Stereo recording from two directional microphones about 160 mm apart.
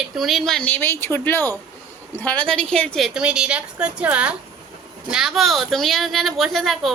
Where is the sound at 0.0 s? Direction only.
Centre (ahead or behind).